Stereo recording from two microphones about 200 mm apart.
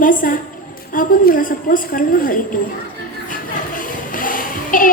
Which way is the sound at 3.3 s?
45° left (ahead or behind).